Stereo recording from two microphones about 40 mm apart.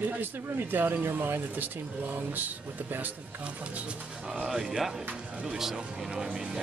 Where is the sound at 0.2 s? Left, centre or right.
Right.